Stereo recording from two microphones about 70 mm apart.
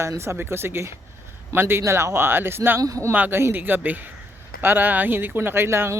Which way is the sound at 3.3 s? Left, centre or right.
Right.